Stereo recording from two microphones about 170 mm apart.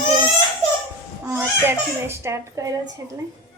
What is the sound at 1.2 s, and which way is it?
A woman's voice, 15° right (ahead or behind).